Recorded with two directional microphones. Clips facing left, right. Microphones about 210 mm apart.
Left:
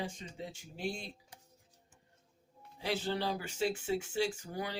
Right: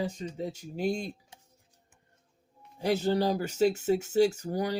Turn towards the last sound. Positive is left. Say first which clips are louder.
# right 9 dB
turn(degrees=-40)  # may be behind; listen again after turning